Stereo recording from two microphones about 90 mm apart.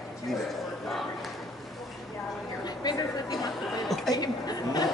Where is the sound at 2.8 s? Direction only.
45° left (ahead or behind).